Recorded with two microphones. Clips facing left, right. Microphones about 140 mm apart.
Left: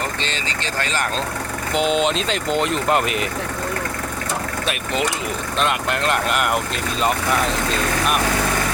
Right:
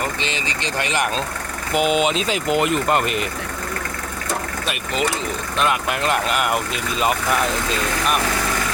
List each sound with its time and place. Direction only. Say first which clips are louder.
0.2 s speech: right 1 dB; 15° right (ahead or behind)
1.7 s speech: right 1 dB; 5° right (ahead or behind)
5.5 s speech: right 1 dB; 5° right (ahead or behind)